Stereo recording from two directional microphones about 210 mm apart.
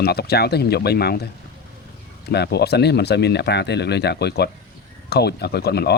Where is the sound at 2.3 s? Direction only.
50° left (ahead or behind).